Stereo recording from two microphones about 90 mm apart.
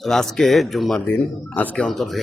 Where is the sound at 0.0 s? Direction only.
5° left (ahead or behind).